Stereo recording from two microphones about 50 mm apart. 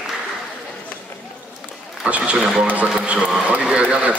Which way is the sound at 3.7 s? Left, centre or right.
Right.